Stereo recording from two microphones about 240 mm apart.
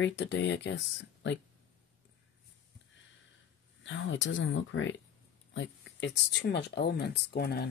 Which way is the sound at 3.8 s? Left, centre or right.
Left.